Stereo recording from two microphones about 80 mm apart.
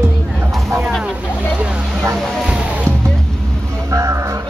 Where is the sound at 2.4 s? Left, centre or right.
Centre.